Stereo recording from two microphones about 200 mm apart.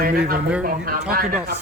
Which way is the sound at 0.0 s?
45° right (ahead or behind).